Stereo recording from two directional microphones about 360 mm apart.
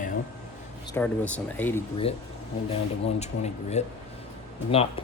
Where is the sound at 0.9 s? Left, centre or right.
Centre.